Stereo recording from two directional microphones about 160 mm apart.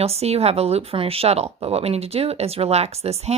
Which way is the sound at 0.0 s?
40° right (ahead or behind).